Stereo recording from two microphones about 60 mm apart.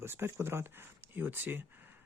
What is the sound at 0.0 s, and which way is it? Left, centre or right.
Speech, right.